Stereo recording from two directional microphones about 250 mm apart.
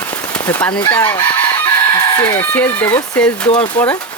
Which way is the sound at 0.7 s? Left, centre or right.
Centre.